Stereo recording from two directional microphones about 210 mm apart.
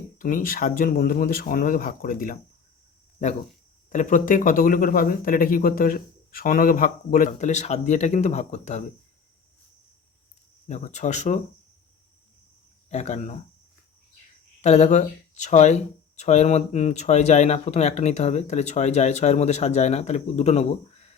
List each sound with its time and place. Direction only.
0.2 s speech: 40° left (ahead or behind)
3.8 s speech: 35° left (ahead or behind)
10.7 s speech: 35° left (ahead or behind)
12.9 s speech: 35° left (ahead or behind)
14.6 s speech: 35° left (ahead or behind)